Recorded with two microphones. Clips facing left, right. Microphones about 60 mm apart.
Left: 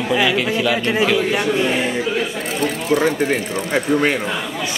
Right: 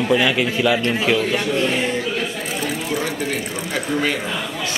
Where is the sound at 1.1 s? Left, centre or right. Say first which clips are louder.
Left 2 dB; centre.